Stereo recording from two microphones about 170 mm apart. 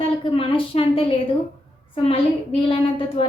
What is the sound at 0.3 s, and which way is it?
Speech, 30° left (ahead or behind).